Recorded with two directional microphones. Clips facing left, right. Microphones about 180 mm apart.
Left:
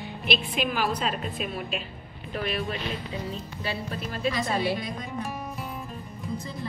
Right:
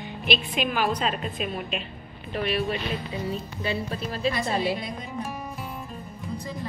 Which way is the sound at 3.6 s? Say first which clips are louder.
Right 3 dB; 25° right (ahead or behind).